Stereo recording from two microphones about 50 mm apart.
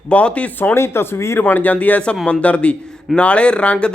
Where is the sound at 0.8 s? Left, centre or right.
Left.